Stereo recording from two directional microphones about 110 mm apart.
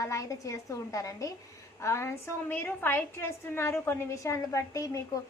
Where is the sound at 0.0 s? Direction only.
30° left (ahead or behind).